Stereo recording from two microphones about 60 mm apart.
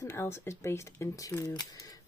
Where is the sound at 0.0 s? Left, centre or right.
Left.